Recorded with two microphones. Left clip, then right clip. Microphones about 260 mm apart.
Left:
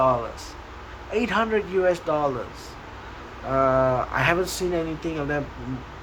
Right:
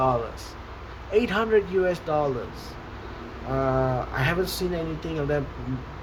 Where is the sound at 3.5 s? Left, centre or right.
Centre.